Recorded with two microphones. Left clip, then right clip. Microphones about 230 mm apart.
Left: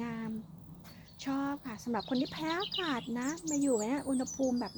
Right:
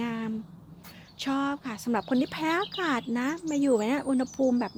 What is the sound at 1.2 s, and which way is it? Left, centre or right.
Speech, right.